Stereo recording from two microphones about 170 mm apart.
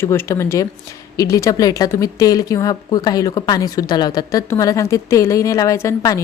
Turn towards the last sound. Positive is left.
turn(degrees=15)  # may be behind; listen again after turning